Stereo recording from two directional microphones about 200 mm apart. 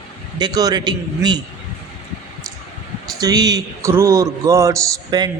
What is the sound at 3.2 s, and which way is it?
A man's voice, 20° right (ahead or behind).